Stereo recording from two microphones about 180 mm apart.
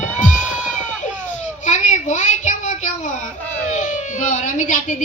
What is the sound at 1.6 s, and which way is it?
A child's voice, 45° left (ahead or behind).